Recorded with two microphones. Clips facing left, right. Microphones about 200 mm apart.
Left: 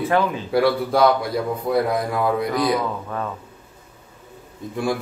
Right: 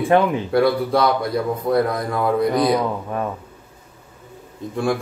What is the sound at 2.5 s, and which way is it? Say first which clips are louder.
Speech: right 3 dB; 20° right (ahead or behind).